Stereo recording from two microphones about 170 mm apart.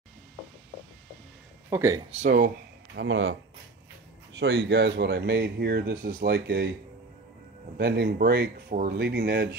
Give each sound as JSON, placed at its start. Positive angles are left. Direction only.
{"t": 1.7, "sound": "speech", "side_deg": -15}
{"t": 2.2, "sound": "speech", "side_deg": -50}
{"t": 3.0, "sound": "speech", "side_deg": -90}
{"t": 7.7, "sound": "speech", "side_deg": -75}